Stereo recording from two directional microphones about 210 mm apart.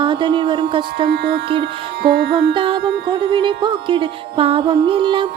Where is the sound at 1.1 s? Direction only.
50° right (ahead or behind).